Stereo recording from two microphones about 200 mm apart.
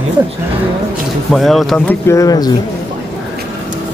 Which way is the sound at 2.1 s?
15° left (ahead or behind).